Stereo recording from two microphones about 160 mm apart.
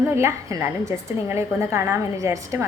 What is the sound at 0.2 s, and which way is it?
A woman's voice, 15° right (ahead or behind).